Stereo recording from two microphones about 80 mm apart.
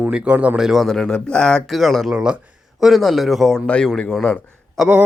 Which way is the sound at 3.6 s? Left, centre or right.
Centre.